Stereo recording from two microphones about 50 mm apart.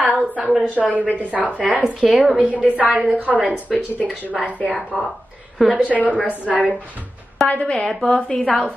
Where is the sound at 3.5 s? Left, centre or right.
Left.